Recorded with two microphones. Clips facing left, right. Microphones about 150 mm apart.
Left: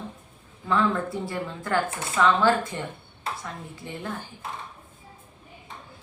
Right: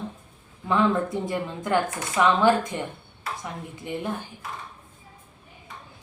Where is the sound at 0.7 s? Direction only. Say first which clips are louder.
Right 2 dB; 20° right (ahead or behind).